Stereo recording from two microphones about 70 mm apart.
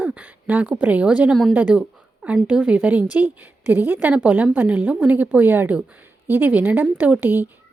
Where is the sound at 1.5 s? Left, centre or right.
Centre.